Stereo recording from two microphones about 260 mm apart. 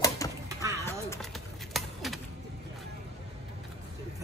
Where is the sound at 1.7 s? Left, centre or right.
Centre.